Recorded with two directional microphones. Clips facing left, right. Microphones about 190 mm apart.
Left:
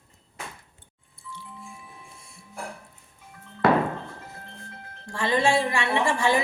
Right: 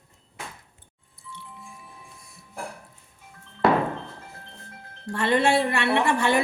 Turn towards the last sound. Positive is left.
turn(degrees=-65)  # may be behind; listen again after turning